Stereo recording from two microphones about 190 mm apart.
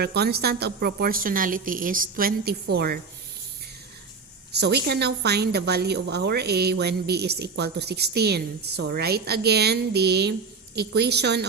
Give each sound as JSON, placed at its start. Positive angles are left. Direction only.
{"t": 0.0, "sound": "a woman's voice", "side_deg": -60}
{"t": 4.5, "sound": "a woman's voice", "side_deg": -60}